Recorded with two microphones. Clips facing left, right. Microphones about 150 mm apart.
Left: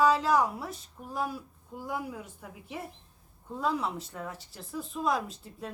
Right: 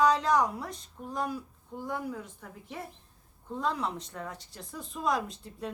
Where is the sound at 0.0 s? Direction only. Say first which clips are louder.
Even; 5° left (ahead or behind).